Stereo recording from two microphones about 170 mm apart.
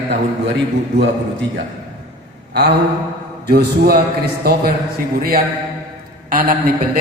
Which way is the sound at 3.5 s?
65° right (ahead or behind).